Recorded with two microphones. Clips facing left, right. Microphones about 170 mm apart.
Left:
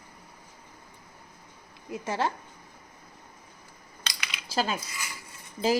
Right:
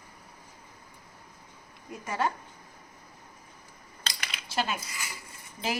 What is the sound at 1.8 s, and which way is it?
Speech, 25° left (ahead or behind).